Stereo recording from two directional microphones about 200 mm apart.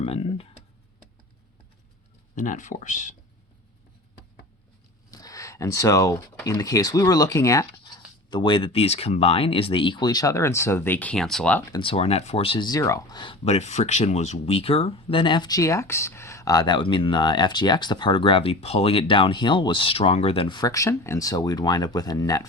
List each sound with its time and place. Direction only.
0.0 s speech: 30° left (ahead or behind)
2.3 s speech: 40° left (ahead or behind)
5.1 s speech: 15° left (ahead or behind)
11.7 s speech: 25° left (ahead or behind)